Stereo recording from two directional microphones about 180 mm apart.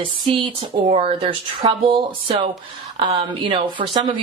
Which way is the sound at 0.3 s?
30° right (ahead or behind).